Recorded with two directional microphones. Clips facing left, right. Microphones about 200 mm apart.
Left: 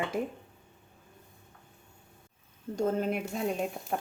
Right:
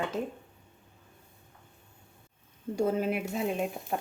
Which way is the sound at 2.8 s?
10° right (ahead or behind).